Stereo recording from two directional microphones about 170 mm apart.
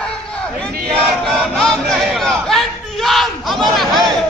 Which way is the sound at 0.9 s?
Centre (ahead or behind).